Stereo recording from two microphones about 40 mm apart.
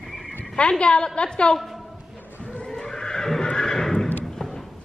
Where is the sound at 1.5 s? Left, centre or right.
Centre.